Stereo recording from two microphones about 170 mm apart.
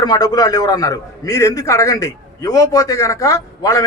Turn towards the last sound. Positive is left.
turn(degrees=20)  # may be behind; listen again after turning